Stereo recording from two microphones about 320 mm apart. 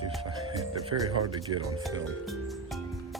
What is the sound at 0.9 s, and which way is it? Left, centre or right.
Speech, right.